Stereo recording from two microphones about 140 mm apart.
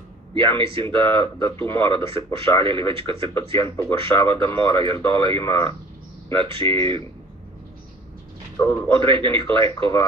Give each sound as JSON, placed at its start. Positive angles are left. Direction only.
{"t": 0.3, "sound": "speech", "side_deg": -35}
{"t": 3.5, "sound": "a man's voice", "side_deg": 20}
{"t": 3.9, "sound": "speech", "side_deg": -40}
{"t": 8.6, "sound": "a man's voice", "side_deg": 20}
{"t": 9.0, "sound": "speech", "side_deg": -35}